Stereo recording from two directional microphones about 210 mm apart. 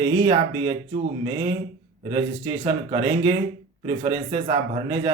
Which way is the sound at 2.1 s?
20° right (ahead or behind).